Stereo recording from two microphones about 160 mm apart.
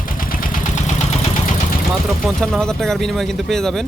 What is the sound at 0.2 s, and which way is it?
Vehicle, 60° left (ahead or behind).